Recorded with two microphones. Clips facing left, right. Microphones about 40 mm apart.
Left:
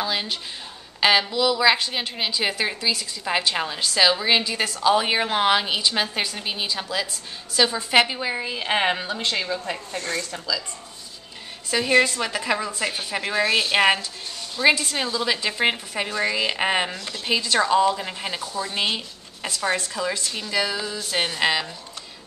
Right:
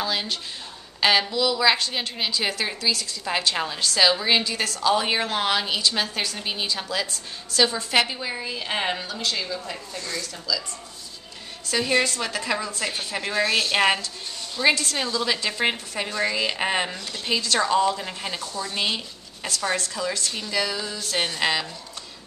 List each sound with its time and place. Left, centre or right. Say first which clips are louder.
0.0 s a woman's voice: left 1 dB; centre; by 9.8 s left
9.9 s speech: left 4 dB; left
11.7 s a woman's voice: left 3 dB; centre